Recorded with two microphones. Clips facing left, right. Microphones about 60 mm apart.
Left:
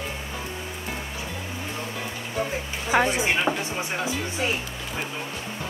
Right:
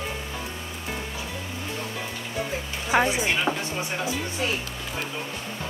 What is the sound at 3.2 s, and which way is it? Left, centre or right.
Speech, left.